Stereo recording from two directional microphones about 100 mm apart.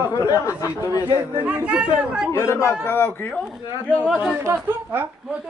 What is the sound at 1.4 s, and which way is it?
Speech, 10° right (ahead or behind).